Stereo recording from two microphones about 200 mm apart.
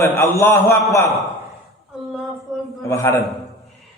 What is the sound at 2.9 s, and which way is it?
Speech, 15° left (ahead or behind).